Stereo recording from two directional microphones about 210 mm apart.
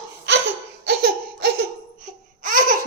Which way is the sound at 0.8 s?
50° right (ahead or behind).